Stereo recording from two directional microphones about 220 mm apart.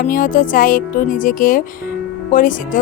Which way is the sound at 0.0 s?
35° left (ahead or behind).